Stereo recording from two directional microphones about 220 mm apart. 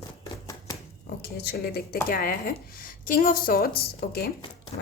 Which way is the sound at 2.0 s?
40° left (ahead or behind).